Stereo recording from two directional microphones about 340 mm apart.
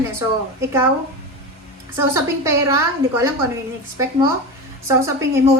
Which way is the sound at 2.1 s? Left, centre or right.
Centre.